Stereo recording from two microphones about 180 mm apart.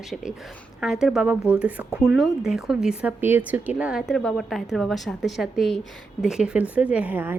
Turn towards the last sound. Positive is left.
turn(degrees=-10)  # may be behind; listen again after turning